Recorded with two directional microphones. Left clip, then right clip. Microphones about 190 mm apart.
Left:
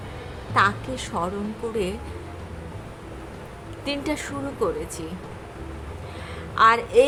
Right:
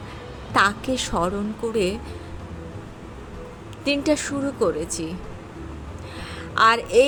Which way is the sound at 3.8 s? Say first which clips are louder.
Right 6 dB; 25° right (ahead or behind).